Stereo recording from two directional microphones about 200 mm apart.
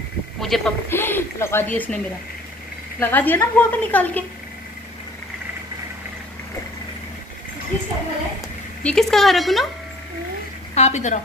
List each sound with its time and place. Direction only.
0.4 s a woman's voice: centre (ahead or behind)
3.0 s a woman's voice: 10° left (ahead or behind)
8.8 s a woman's voice: centre (ahead or behind)
10.7 s a woman's voice: 35° left (ahead or behind)